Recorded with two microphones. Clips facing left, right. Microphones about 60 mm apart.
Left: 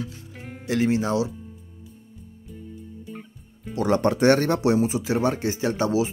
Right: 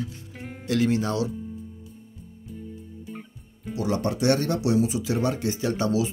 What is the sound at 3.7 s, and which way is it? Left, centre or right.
Speech, left.